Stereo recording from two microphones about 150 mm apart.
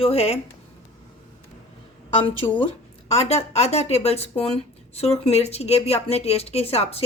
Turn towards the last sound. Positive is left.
turn(degrees=40)  # may be behind; listen again after turning